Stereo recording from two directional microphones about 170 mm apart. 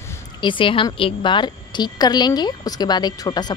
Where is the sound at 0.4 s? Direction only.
30° left (ahead or behind).